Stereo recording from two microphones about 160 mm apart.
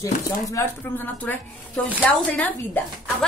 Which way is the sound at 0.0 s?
20° left (ahead or behind).